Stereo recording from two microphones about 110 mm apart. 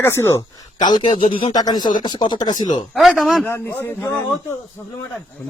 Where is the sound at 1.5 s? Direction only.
40° left (ahead or behind).